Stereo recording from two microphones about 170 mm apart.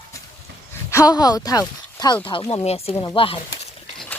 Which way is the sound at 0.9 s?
20° left (ahead or behind).